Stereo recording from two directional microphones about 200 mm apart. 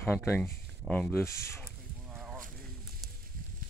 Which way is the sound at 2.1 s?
Centre (ahead or behind).